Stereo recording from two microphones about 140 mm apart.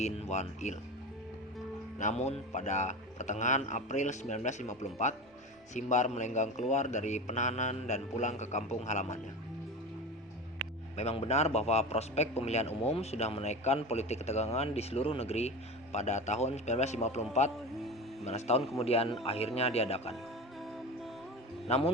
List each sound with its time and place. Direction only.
0.0 s a man's voice: 55° left (ahead or behind)
2.0 s a man's voice: 55° left (ahead or behind)
10.9 s a man's voice: 50° left (ahead or behind)
21.7 s a man's voice: 45° left (ahead or behind)